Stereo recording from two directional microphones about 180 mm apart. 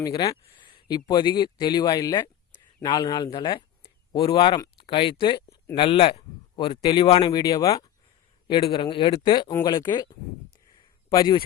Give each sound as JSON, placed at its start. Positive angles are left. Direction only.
{"t": 0.0, "sound": "speech", "side_deg": 20}